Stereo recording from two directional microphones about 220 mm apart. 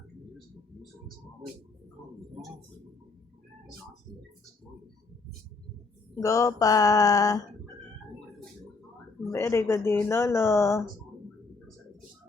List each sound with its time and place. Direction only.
6.2 s speech: 15° left (ahead or behind)
9.3 s speech: 10° left (ahead or behind)